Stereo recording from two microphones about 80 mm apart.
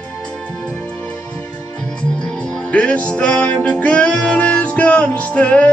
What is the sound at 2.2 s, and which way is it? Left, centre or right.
Music, centre.